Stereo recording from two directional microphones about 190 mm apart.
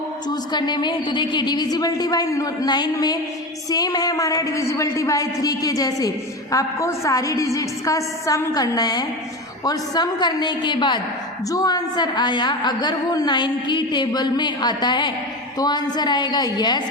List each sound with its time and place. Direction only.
0.5 s a woman's voice: 20° left (ahead or behind)